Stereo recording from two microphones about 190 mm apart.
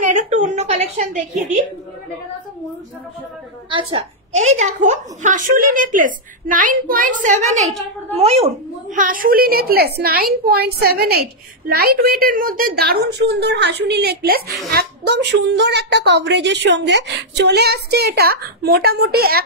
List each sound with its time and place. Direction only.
0.0 s a woman's voice: 40° right (ahead or behind)
3.7 s a woman's voice: 30° right (ahead or behind)
8.9 s a woman's voice: 45° right (ahead or behind)